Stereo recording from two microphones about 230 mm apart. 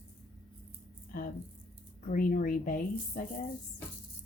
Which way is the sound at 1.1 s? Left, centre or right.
Left.